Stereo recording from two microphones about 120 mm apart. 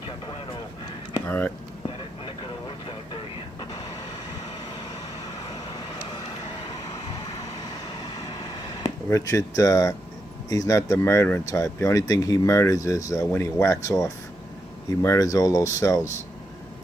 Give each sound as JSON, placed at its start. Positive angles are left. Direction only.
{"t": 1.2, "sound": "speech", "side_deg": 15}
{"t": 8.0, "sound": "a sound", "side_deg": 35}
{"t": 9.0, "sound": "speech", "side_deg": 25}